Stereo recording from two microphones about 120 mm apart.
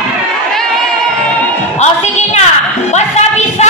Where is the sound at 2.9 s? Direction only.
70° left (ahead or behind).